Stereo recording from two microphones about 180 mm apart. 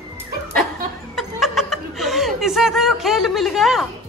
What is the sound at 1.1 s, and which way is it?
Chuckle, centre (ahead or behind).